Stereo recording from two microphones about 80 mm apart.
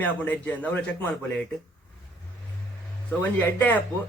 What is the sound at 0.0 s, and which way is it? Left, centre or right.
Speech, centre.